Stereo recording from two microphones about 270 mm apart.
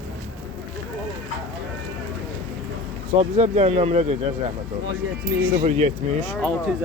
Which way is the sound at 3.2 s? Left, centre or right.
Right.